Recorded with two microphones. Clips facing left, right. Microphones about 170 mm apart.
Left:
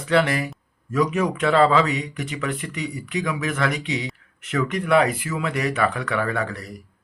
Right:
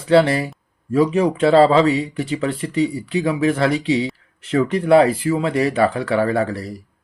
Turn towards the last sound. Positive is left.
turn(degrees=-35)  # may be behind; listen again after turning